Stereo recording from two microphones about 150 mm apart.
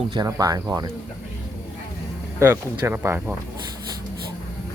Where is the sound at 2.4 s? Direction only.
15° right (ahead or behind).